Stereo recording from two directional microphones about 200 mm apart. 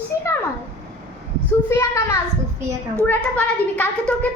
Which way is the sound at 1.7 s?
10° left (ahead or behind).